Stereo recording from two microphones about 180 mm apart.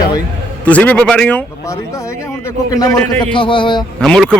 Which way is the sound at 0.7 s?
10° left (ahead or behind).